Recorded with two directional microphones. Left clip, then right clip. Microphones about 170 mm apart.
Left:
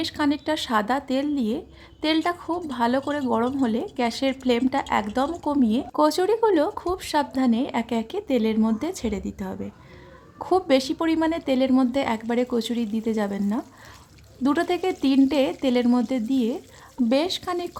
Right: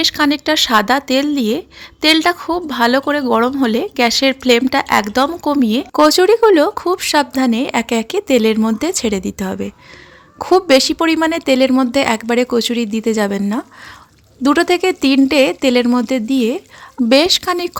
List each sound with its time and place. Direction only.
0.0 s speech: 20° right (ahead or behind)